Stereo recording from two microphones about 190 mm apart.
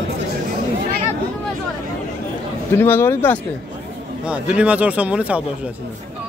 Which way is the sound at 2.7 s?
10° left (ahead or behind).